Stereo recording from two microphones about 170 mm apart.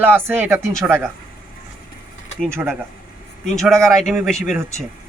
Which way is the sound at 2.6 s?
15° right (ahead or behind).